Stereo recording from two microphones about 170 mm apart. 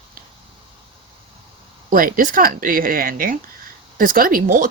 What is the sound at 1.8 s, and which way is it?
Speech, 55° right (ahead or behind).